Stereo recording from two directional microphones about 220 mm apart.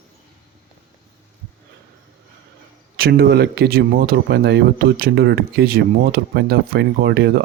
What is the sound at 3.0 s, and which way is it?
Speech, 45° right (ahead or behind).